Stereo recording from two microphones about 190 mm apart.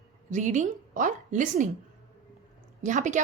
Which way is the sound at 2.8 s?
40° right (ahead or behind).